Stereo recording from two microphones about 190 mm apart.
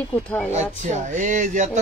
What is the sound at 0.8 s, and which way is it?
Speech, 40° right (ahead or behind).